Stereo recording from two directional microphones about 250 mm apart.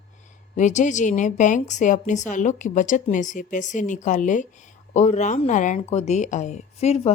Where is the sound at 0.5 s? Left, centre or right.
Left.